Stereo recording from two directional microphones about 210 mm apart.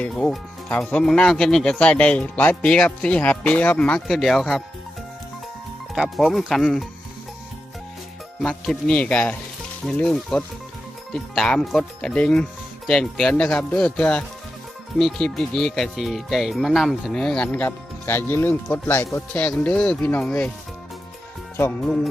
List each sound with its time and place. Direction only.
0.0 s speech: 5° left (ahead or behind)
5.9 s speech: centre (ahead or behind)
8.4 s speech: centre (ahead or behind)
21.6 s speech: 5° left (ahead or behind)